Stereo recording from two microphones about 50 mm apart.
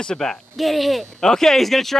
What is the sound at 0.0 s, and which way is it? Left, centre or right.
Speech, centre.